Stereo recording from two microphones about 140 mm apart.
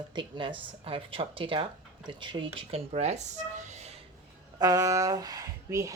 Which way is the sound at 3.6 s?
55° right (ahead or behind).